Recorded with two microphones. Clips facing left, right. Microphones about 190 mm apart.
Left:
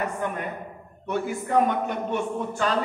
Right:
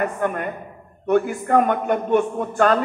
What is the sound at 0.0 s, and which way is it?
A man's voice, 55° right (ahead or behind).